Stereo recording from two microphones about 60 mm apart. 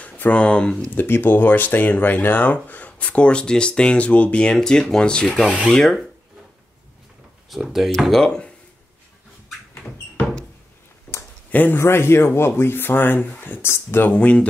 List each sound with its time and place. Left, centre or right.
0.0 s speech: left
0.9 s speech: left; by 5.3 s centre
5.7 s rub: centre
7.4 s speech: centre
11.5 s a man's voice: left
11.8 s speech: left
14.1 s speech: centre